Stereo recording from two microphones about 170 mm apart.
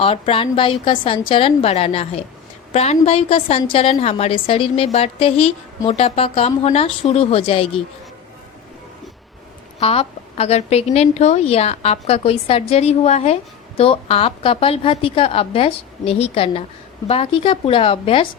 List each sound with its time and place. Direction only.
0.0 s a woman's voice: 35° left (ahead or behind)
9.8 s a woman's voice: 35° left (ahead or behind)